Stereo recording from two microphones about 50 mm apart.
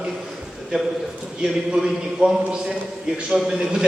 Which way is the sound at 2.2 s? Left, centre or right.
Right.